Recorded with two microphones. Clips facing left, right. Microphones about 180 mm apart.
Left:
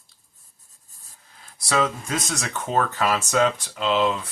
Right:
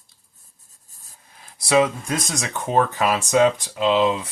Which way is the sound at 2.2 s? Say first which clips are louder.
Right 2 dB; 15° right (ahead or behind).